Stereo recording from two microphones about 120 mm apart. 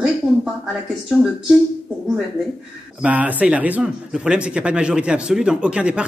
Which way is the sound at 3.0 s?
10° right (ahead or behind).